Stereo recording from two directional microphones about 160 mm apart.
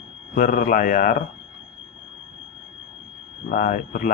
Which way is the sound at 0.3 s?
60° left (ahead or behind).